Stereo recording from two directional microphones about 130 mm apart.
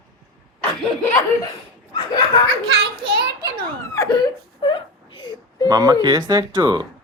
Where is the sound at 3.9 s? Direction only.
30° left (ahead or behind).